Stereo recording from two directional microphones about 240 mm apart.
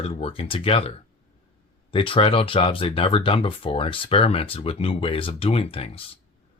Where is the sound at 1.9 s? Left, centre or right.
Left.